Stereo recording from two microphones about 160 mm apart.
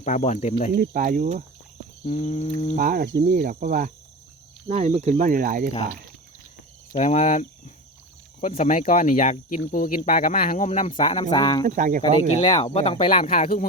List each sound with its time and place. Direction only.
0.0 s speech: 45° left (ahead or behind)
0.7 s speech: 65° right (ahead or behind)
2.0 s speech: 45° left (ahead or behind)
2.7 s speech: 60° right (ahead or behind)
4.7 s speech: 40° right (ahead or behind); by 5.7 s 60° right (ahead or behind)
6.9 s speech: 45° left (ahead or behind); by 11.6 s 30° left (ahead or behind)
11.6 s speech: 55° right (ahead or behind)
12.5 s speech: 40° left (ahead or behind)